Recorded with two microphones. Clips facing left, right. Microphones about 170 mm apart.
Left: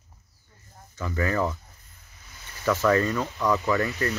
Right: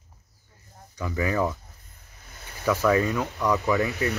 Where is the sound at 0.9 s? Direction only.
15° right (ahead or behind).